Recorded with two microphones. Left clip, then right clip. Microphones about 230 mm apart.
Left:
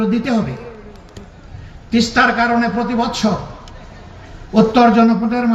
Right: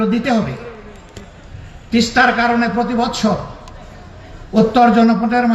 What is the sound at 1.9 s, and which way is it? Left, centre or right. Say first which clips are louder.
Speech: right 1 dB; centre.